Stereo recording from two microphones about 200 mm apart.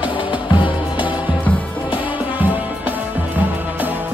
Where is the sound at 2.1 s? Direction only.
10° right (ahead or behind).